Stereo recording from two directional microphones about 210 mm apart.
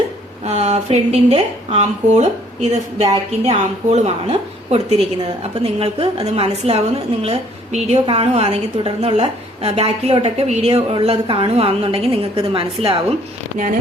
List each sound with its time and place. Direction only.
0.4 s a woman's voice: 30° right (ahead or behind)